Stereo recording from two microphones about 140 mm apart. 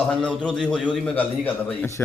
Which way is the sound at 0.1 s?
5° left (ahead or behind).